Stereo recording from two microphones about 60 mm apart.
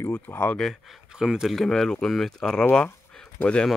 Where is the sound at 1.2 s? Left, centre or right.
Centre.